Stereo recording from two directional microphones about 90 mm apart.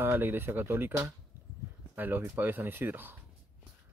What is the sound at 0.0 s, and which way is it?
Speech, 25° right (ahead or behind).